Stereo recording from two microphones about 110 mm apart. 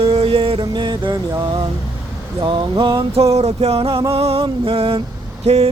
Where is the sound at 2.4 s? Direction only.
50° right (ahead or behind).